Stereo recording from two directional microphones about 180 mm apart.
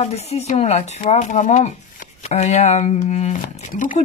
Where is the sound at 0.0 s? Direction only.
35° left (ahead or behind).